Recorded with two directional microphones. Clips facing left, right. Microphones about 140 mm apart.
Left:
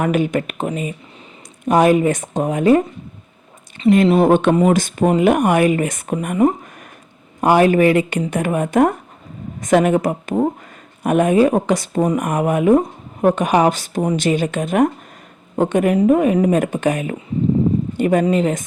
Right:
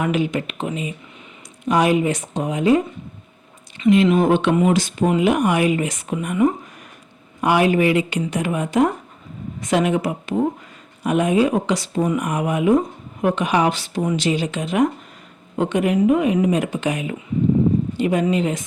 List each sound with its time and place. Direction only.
0.0 s speech: 50° left (ahead or behind)
3.9 s speech: 40° left (ahead or behind)
6.2 s speech: 40° left (ahead or behind)